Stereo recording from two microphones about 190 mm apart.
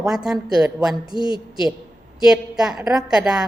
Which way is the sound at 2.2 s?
5° right (ahead or behind).